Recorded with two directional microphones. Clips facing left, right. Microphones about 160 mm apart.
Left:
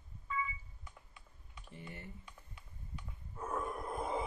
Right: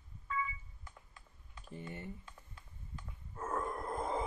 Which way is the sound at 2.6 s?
10° left (ahead or behind).